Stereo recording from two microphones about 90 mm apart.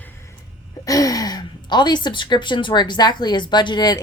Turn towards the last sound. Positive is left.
turn(degrees=50)  # may be behind; listen again after turning